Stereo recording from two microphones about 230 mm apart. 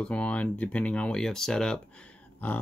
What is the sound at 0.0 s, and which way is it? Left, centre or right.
Speech, centre.